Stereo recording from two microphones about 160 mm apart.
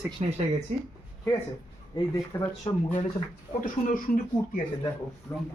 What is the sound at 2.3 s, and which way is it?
Speech, 15° left (ahead or behind).